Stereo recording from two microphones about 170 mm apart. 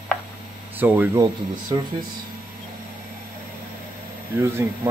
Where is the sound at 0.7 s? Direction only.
10° right (ahead or behind).